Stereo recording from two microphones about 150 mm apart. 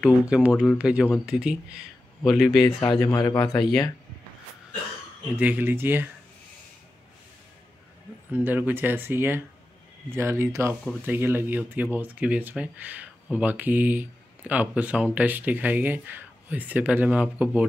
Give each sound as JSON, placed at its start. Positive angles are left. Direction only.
{"t": 0.0, "sound": "speech", "side_deg": -5}
{"t": 2.6, "sound": "speech", "side_deg": 30}
{"t": 5.3, "sound": "speech", "side_deg": -10}
{"t": 8.3, "sound": "speech", "side_deg": -10}